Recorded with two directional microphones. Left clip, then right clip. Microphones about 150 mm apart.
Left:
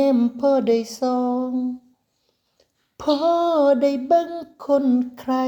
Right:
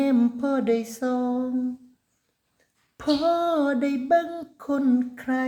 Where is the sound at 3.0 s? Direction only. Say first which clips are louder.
Left 4 dB; centre (ahead or behind).